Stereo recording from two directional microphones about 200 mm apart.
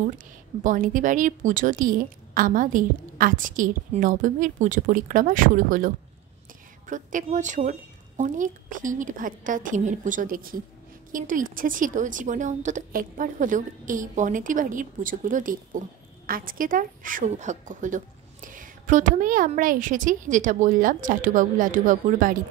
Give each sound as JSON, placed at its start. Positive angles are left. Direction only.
{"t": 0.7, "sound": "a woman's voice", "side_deg": -40}